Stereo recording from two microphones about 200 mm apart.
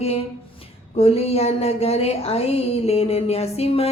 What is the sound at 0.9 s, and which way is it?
Speech, 30° left (ahead or behind).